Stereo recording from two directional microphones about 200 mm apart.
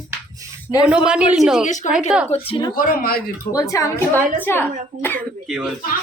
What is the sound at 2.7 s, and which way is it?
Speech, 45° left (ahead or behind).